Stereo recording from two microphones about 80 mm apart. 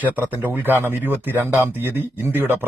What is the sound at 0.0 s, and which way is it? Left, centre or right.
Speech, right.